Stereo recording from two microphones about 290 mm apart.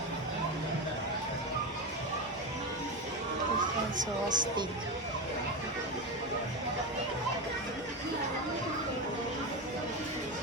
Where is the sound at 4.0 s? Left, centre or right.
Right.